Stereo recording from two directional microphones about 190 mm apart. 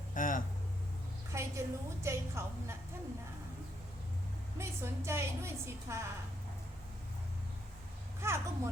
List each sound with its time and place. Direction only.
0.1 s a sound: 45° left (ahead or behind)
1.3 s a woman's voice: 15° right (ahead or behind)
4.5 s a woman's voice: 15° right (ahead or behind)
8.2 s a woman's voice: 15° right (ahead or behind)